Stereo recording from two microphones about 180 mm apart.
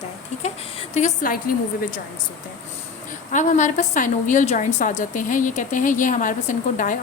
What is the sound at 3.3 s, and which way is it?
A woman's voice, 45° left (ahead or behind).